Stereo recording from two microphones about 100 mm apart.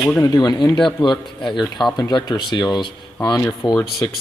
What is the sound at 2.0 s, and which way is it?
Speech, 45° left (ahead or behind).